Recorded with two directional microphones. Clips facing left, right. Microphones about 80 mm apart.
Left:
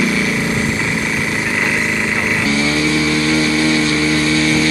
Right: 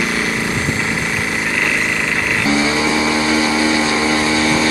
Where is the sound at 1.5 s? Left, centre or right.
Centre.